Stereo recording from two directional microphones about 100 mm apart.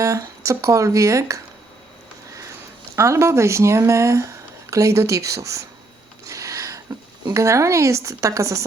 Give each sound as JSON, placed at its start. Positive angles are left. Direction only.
{"t": 0.0, "sound": "speech", "side_deg": -35}
{"t": 2.9, "sound": "speech", "side_deg": -30}
{"t": 6.2, "sound": "a sound", "side_deg": -35}
{"t": 7.3, "sound": "a woman's voice", "side_deg": -30}